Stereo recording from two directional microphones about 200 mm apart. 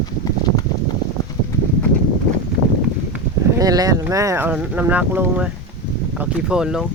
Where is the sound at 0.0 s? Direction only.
20° left (ahead or behind).